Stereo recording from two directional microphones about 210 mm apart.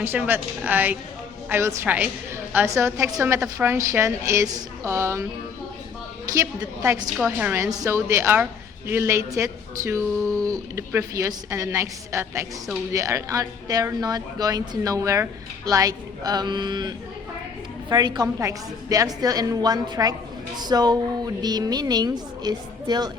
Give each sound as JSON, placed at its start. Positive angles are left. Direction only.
{"t": 0.0, "sound": "a woman's voice", "side_deg": -10}
{"t": 6.3, "sound": "a woman's voice", "side_deg": -15}